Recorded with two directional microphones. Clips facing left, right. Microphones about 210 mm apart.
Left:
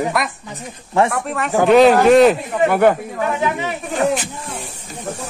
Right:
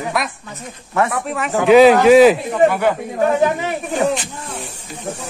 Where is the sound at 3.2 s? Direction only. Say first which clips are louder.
Right 5 dB; 40° right (ahead or behind).